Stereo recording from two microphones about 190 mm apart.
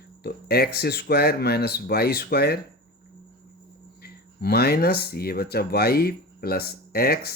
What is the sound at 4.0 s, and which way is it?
Speech, 55° left (ahead or behind).